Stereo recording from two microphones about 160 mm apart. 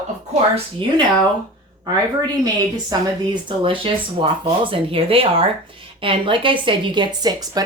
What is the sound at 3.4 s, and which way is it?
Speech, 35° right (ahead or behind).